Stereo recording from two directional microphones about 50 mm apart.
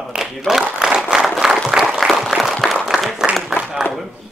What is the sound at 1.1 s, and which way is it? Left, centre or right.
Applause, centre.